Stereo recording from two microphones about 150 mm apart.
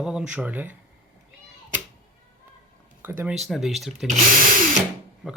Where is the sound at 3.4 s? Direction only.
Centre (ahead or behind).